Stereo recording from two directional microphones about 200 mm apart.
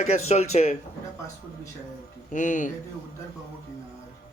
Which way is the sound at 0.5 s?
35° left (ahead or behind).